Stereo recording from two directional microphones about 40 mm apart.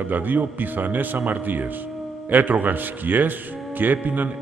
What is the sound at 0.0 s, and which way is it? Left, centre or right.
A man's voice, right.